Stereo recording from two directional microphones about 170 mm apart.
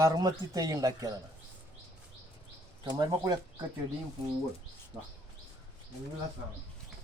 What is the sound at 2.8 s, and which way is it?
Speech, 25° right (ahead or behind).